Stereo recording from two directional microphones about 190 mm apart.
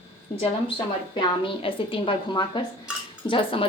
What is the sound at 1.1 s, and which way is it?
A woman's voice, 25° left (ahead or behind).